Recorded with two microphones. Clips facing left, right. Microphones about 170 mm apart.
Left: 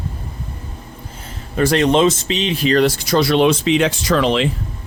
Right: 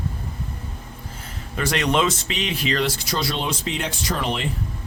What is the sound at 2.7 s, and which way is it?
Speech, 50° left (ahead or behind).